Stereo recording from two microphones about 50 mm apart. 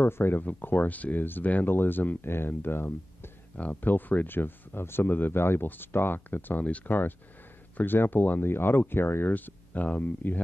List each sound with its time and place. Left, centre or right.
0.0 s speech: left
3.5 s speech: left
6.6 s speech: left
7.7 s speech: left
8.5 s speech: left
9.3 s speech: left